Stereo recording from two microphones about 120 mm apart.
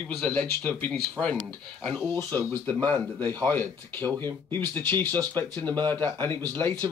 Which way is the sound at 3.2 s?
30° right (ahead or behind).